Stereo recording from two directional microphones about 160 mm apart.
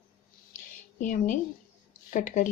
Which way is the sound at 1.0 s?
55° left (ahead or behind).